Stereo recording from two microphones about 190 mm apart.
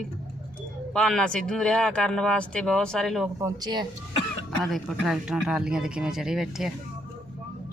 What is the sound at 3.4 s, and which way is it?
Speech, 20° right (ahead or behind).